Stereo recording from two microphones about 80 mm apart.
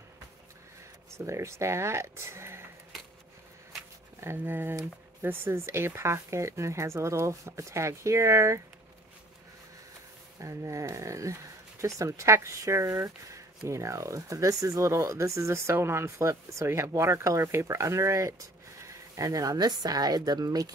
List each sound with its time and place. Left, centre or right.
1.1 s speech: right
4.2 s speech: right
10.4 s speech: right